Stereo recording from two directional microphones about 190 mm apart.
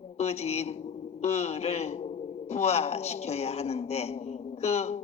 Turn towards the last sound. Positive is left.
turn(degrees=35)  # may be behind; listen again after turning